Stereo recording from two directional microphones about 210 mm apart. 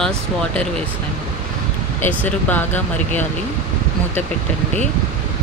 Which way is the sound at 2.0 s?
5° left (ahead or behind).